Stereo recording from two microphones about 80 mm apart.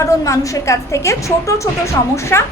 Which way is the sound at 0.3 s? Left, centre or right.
Left.